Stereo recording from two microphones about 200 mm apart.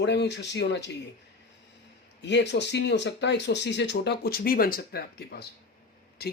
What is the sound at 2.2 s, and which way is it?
Speech, 60° left (ahead or behind).